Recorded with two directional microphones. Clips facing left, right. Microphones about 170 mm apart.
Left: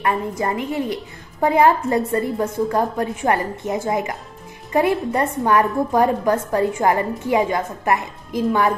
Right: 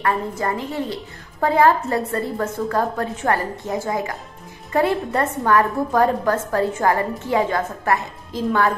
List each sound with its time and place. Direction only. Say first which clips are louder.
0.4 s a woman's voice: left 2 dB; 20° left (ahead or behind)